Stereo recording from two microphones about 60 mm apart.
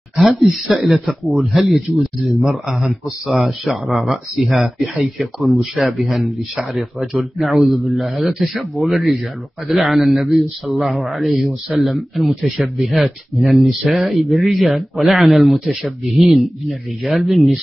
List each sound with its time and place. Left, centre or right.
0.1 s a man's voice: centre